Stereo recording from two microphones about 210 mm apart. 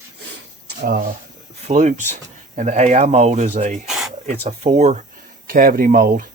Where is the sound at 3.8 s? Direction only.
Centre (ahead or behind).